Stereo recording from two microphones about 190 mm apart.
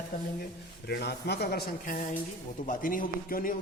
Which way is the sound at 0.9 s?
60° left (ahead or behind).